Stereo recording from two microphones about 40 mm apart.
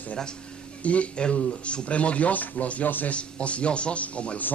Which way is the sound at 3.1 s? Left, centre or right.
Left.